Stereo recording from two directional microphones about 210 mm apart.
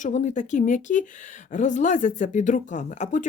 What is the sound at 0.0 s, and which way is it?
A woman's voice, 35° left (ahead or behind).